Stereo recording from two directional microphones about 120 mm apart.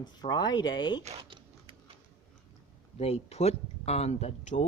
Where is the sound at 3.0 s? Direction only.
60° left (ahead or behind).